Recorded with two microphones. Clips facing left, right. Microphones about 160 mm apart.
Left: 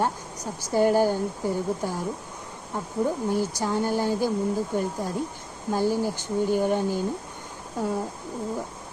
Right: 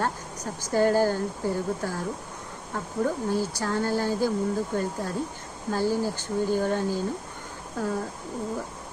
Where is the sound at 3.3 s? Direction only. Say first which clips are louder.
Left 1 dB; 15° left (ahead or behind).